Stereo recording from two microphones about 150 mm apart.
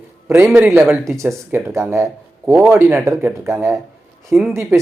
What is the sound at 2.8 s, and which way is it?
Speech, 20° right (ahead or behind).